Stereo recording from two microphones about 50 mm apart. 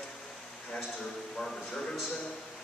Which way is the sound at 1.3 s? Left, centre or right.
Centre.